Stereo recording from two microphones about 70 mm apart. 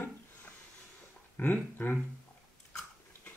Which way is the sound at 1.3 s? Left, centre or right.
Left.